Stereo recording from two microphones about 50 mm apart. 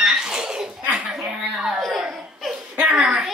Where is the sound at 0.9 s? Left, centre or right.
Centre.